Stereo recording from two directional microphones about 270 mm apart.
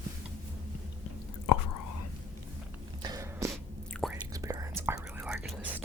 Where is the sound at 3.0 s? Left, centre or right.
Centre.